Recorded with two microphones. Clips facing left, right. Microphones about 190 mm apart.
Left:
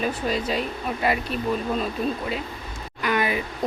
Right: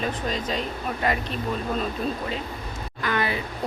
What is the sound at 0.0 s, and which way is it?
Speech, 10° left (ahead or behind).